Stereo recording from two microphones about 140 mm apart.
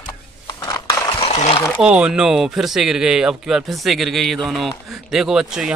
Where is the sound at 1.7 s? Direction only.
5° right (ahead or behind).